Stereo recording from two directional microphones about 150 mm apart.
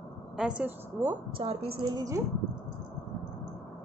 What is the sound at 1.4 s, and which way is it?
Speech, 40° right (ahead or behind).